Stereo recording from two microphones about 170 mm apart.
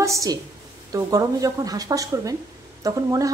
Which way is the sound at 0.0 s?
20° right (ahead or behind).